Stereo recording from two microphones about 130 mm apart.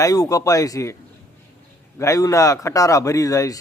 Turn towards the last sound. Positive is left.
turn(degrees=25)  # may be behind; listen again after turning